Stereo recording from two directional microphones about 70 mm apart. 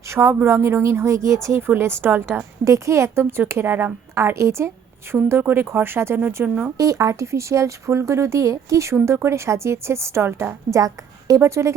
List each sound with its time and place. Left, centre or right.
0.1 s a woman's voice: right
2.6 s a woman's voice: right
5.4 s a woman's voice: right
6.4 s speech: right
6.7 s speech: right
10.7 s a woman's voice: right